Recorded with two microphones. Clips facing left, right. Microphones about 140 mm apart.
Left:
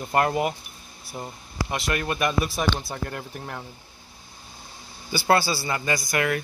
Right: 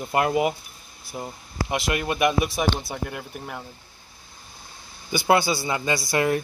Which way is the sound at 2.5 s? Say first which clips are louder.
Right 1 dB; 5° right (ahead or behind).